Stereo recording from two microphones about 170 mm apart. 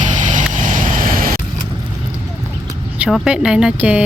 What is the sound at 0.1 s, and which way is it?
Vehicle, 45° right (ahead or behind).